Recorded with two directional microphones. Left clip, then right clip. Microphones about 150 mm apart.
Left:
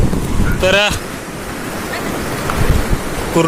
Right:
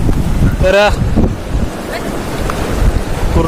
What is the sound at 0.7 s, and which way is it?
Speech, 5° left (ahead or behind).